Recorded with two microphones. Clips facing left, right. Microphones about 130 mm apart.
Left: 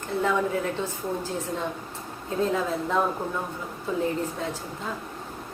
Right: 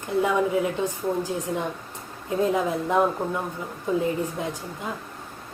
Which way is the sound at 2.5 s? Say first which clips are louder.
Right 3 dB; 15° right (ahead or behind).